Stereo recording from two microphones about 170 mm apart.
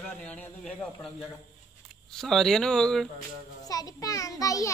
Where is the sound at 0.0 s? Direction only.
10° left (ahead or behind).